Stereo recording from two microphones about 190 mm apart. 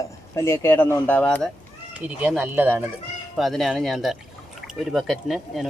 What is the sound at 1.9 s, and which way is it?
Speech, 10° right (ahead or behind).